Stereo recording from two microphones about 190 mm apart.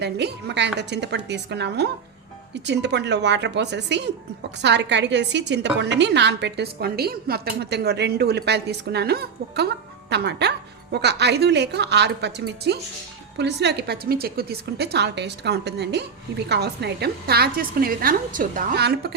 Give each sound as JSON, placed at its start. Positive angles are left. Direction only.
{"t": 0.0, "sound": "a woman's voice", "side_deg": -60}